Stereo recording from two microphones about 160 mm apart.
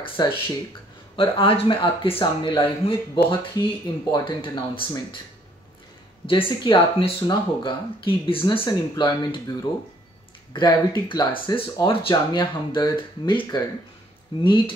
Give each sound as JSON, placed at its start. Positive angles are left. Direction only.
{"t": 0.0, "sound": "speech", "side_deg": 35}
{"t": 6.2, "sound": "speech", "side_deg": 35}